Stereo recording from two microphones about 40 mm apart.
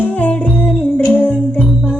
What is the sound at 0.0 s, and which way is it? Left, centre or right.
Humming, left.